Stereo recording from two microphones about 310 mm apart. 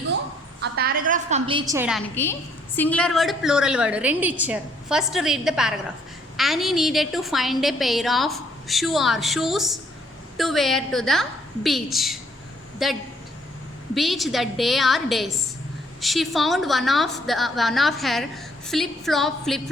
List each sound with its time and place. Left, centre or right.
0.6 s a woman's voice: right; by 19.7 s centre